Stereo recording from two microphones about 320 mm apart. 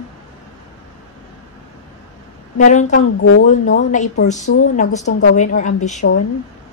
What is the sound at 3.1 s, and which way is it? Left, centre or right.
Speech, left.